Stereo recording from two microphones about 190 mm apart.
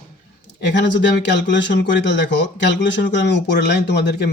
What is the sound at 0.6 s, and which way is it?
Speech, 65° left (ahead or behind).